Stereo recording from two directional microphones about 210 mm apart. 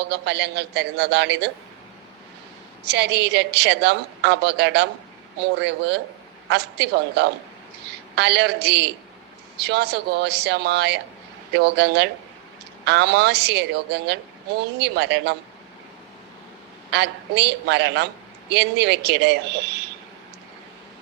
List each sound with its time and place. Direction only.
0.1 s a woman's voice: 55° right (ahead or behind)
2.8 s a woman's voice: 55° right (ahead or behind)
16.9 s a woman's voice: 55° right (ahead or behind)